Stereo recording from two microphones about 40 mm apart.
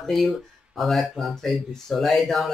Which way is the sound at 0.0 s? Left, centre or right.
Centre.